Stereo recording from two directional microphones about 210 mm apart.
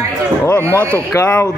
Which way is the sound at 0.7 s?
10° right (ahead or behind).